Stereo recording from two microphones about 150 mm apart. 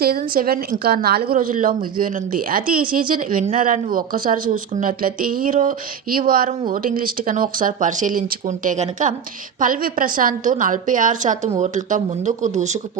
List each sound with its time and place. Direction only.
0.0 s a woman's voice: 80° right; by 9.1 s 55° right (ahead or behind)
9.6 s speech: 65° right (ahead or behind)